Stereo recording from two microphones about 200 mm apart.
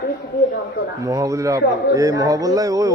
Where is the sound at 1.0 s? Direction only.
15° right (ahead or behind).